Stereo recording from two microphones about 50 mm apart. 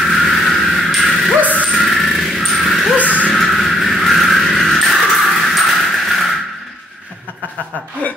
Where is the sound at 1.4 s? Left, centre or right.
Left.